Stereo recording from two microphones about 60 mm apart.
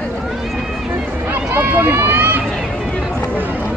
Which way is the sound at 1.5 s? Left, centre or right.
Right.